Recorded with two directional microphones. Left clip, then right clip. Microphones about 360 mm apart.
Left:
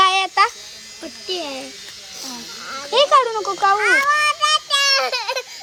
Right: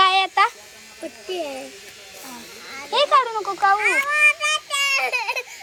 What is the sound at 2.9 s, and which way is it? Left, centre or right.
Speech, centre.